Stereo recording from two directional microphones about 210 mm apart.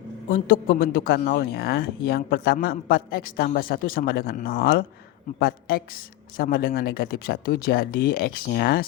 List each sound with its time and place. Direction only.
0.3 s speech: 45° left (ahead or behind)